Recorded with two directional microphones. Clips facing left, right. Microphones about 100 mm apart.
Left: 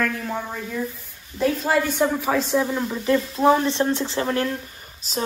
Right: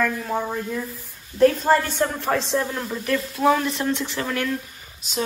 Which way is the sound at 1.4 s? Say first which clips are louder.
Right 4 dB; 5° left (ahead or behind).